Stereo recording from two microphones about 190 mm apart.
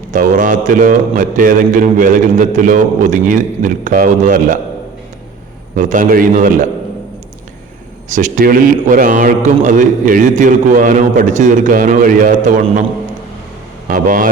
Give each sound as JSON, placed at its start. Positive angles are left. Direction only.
{"t": 0.1, "sound": "a man's voice", "side_deg": -45}
{"t": 5.7, "sound": "a man's voice", "side_deg": -45}
{"t": 8.1, "sound": "a man's voice", "side_deg": -45}
{"t": 13.8, "sound": "a man's voice", "side_deg": -45}